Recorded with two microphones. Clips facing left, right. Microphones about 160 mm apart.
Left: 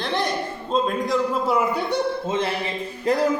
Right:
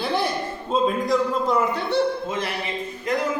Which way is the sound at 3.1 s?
35° left (ahead or behind).